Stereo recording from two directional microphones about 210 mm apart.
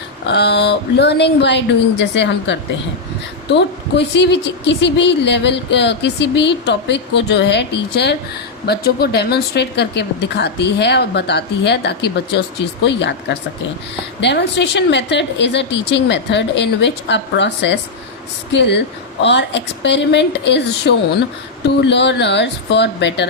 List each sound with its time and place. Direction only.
0.3 s a woman's voice: 55° left (ahead or behind)
14.2 s a woman's voice: 55° left (ahead or behind)